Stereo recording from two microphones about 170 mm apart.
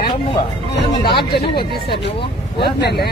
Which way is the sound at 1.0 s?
30° left (ahead or behind).